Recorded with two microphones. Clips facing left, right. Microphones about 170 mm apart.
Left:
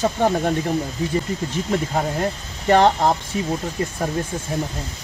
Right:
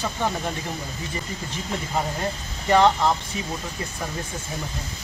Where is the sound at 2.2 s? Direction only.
55° left (ahead or behind).